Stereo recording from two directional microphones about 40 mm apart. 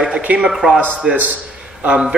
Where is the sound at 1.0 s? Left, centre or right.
Centre.